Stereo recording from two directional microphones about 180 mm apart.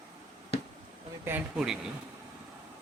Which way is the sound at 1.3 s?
5° right (ahead or behind).